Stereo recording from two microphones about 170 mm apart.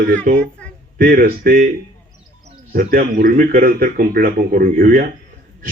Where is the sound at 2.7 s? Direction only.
55° right (ahead or behind).